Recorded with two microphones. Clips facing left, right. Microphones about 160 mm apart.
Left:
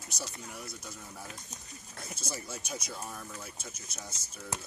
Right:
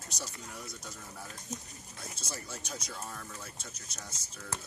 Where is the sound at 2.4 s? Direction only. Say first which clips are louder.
Left 2 dB; 5° left (ahead or behind).